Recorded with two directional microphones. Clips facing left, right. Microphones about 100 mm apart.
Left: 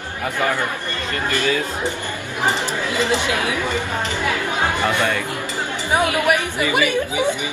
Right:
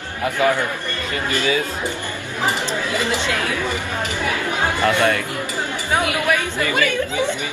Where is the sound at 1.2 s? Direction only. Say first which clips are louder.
Even; 15° right (ahead or behind).